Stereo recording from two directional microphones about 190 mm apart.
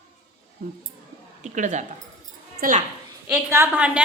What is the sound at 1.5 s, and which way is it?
A woman's voice, 40° right (ahead or behind).